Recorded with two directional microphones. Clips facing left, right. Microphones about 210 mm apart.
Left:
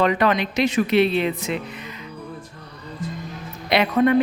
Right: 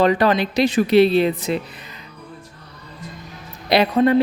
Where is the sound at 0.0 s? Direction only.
35° right (ahead or behind).